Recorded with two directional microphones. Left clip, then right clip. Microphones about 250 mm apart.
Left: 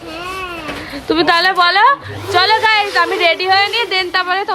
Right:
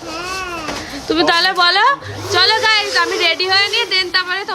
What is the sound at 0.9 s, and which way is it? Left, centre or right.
A woman's voice, centre.